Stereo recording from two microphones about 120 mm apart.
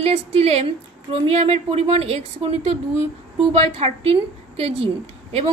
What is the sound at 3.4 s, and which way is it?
A woman's voice, 55° right (ahead or behind).